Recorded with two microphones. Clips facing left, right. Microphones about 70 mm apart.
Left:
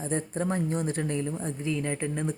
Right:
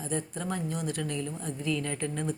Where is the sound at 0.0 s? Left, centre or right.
Left.